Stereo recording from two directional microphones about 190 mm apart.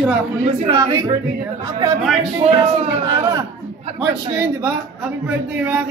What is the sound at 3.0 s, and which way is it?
Speech, 20° right (ahead or behind).